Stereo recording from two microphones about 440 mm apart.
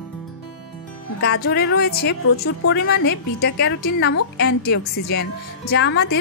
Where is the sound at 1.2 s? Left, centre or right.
Left.